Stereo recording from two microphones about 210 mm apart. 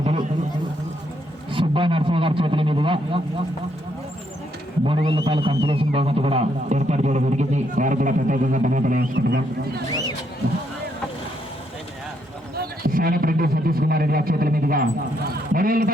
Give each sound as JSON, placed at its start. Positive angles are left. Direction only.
{"t": 1.5, "sound": "a man's voice", "side_deg": -25}
{"t": 4.9, "sound": "speech", "side_deg": -25}
{"t": 12.5, "sound": "speech", "side_deg": -45}